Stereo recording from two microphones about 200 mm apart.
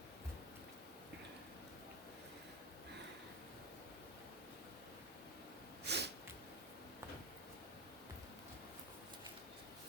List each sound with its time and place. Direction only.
5.8 s sneeze: 55° right (ahead or behind)